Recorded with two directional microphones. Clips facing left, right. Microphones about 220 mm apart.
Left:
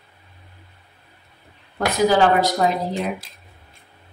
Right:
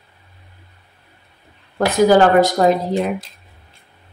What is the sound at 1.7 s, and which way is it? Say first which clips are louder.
Speech: right 5 dB; 45° right (ahead or behind).